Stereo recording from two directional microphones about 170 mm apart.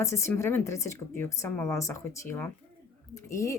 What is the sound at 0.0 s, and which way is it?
A woman's voice, 15° left (ahead or behind).